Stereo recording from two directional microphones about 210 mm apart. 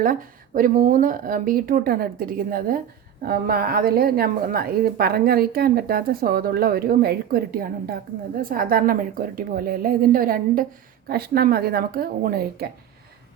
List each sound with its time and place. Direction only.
0.0 s a woman's voice: 40° right (ahead or behind)